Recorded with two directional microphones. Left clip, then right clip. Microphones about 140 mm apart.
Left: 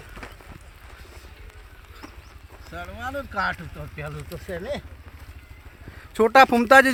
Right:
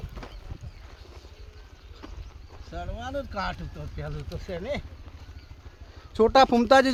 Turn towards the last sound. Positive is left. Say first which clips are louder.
# left 4 dB
turn(degrees=10)  # may be behind; listen again after turning